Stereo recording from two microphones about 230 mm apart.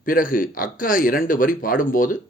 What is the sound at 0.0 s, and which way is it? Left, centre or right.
Speech, left.